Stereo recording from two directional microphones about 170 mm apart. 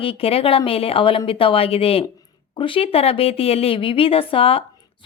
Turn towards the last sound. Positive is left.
turn(degrees=30)  # may be behind; listen again after turning